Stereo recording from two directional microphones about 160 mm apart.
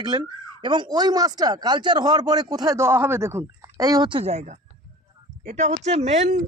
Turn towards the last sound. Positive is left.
turn(degrees=-45)  # may be behind; listen again after turning